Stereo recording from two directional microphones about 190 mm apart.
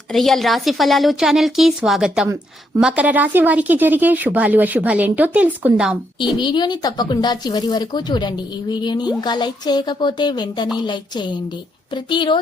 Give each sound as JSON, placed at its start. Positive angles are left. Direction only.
{"t": 0.1, "sound": "a woman's voice", "side_deg": 0}
{"t": 6.4, "sound": "speech", "side_deg": 20}